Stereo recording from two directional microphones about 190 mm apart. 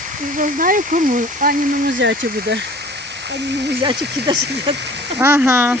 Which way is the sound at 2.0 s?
70° right (ahead or behind).